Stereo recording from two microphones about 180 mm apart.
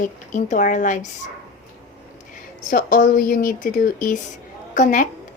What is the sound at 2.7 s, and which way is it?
A woman's voice, 50° left (ahead or behind).